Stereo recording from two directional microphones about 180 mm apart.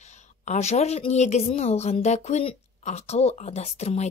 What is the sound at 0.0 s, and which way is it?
A woman's voice, 40° left (ahead or behind).